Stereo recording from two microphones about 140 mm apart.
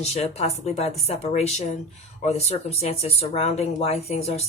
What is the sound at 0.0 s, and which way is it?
Speech, 50° left (ahead or behind).